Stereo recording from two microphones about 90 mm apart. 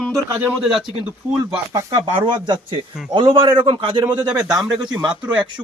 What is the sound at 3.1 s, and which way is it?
Speech, 65° right (ahead or behind).